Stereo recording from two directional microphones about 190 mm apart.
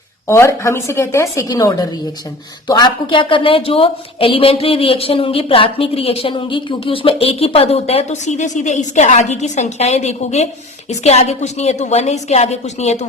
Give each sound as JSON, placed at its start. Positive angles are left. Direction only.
{"t": 0.3, "sound": "a woman's voice", "side_deg": 15}